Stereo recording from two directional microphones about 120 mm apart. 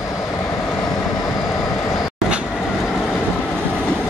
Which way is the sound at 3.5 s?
10° left (ahead or behind).